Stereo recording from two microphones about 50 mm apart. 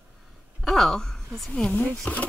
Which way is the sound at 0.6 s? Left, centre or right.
Centre.